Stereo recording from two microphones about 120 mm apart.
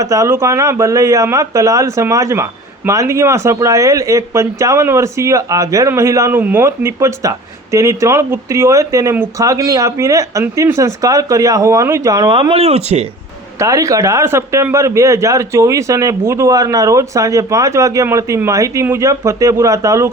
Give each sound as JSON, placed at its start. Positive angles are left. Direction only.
{"t": 0.0, "sound": "a man's voice", "side_deg": -30}
{"t": 12.3, "sound": "speech", "side_deg": -45}
{"t": 13.6, "sound": "a man's voice", "side_deg": -25}